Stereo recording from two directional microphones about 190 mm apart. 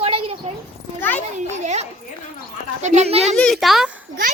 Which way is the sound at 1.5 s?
35° right (ahead or behind).